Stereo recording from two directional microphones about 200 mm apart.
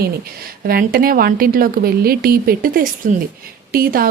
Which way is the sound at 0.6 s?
45° right (ahead or behind).